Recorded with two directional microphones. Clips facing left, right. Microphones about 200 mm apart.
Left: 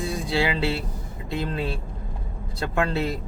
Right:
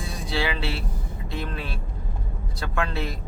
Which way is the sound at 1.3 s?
25° left (ahead or behind).